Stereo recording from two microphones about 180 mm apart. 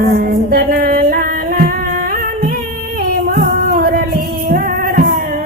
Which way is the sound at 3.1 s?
55° right (ahead or behind).